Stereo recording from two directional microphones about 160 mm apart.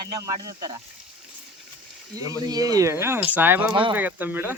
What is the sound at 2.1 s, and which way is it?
Speech, 20° right (ahead or behind).